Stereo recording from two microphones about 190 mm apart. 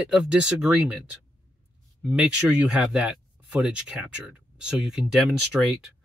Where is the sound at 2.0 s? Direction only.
5° right (ahead or behind).